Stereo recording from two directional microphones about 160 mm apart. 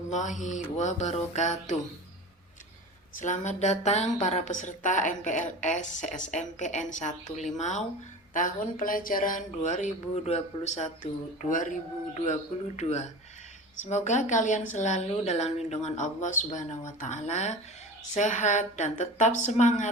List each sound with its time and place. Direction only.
0.1 s speech: 50° left (ahead or behind)
3.2 s speech: 50° left (ahead or behind)